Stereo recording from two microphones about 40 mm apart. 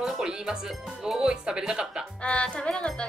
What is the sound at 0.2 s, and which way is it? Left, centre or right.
Music, centre.